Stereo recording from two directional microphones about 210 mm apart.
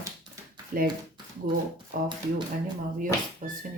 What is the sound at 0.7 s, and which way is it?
Speech, 40° right (ahead or behind).